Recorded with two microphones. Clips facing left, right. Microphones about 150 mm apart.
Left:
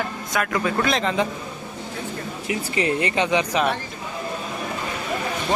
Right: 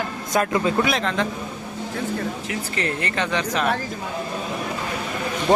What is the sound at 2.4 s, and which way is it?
Speech, 10° left (ahead or behind).